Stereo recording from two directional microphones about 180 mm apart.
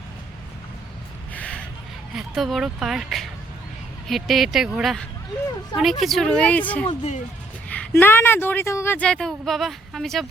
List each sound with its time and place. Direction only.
1.3 s gasp: 5° left (ahead or behind)
2.1 s speech: centre (ahead or behind)
6.8 s speech: 35° left (ahead or behind)
7.7 s speech: 10° left (ahead or behind)